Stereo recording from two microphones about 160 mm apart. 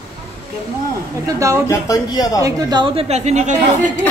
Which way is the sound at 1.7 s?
20° left (ahead or behind).